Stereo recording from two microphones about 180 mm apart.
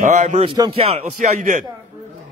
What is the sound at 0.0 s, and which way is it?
Speech, 40° right (ahead or behind).